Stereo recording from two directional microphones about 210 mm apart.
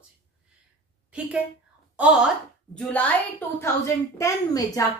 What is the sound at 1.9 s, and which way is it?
Speech, 5° right (ahead or behind).